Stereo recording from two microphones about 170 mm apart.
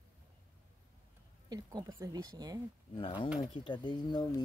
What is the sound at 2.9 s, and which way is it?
Speech, 30° left (ahead or behind).